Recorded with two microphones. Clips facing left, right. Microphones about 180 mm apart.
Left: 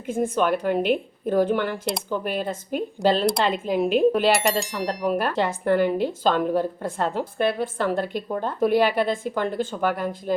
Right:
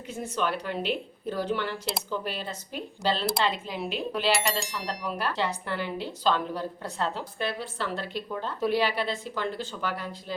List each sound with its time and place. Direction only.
0.1 s speech: 50° left (ahead or behind)
4.3 s speech: centre (ahead or behind)
4.9 s speech: 50° left (ahead or behind)